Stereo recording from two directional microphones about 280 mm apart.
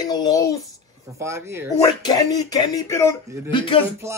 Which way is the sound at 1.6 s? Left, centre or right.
Centre.